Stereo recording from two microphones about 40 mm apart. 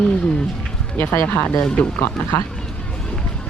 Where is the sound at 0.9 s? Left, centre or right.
Left.